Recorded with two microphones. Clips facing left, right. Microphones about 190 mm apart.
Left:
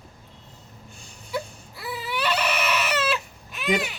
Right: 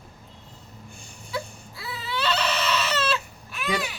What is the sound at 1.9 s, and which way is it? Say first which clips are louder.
Crying: left 1 dB; 15° left (ahead or behind).